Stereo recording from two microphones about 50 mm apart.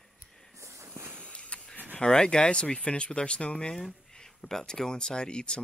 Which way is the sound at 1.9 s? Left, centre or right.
Centre.